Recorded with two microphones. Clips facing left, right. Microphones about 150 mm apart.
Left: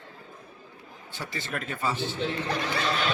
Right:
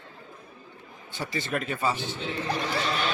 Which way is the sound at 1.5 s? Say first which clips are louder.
Right 4 dB; 20° right (ahead or behind).